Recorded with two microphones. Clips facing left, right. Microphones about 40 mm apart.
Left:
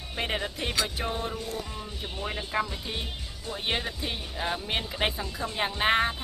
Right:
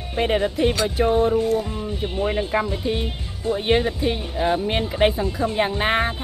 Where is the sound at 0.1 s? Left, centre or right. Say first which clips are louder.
Right 10 dB; centre.